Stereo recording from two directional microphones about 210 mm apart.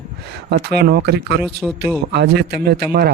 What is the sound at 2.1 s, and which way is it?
Speech, 50° right (ahead or behind).